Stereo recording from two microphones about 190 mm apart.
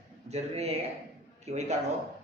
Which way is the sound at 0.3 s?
35° right (ahead or behind).